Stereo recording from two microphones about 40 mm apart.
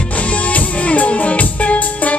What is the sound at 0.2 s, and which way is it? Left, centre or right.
Music, left.